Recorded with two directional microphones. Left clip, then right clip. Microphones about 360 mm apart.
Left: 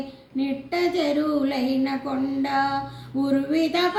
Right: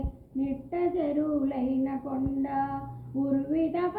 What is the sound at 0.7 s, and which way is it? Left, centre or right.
Female singing, left.